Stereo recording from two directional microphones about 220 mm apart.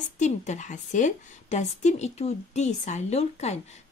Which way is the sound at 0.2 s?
35° left (ahead or behind).